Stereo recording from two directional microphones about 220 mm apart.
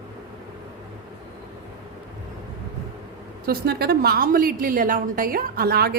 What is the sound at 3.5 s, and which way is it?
A woman's voice, 45° right (ahead or behind).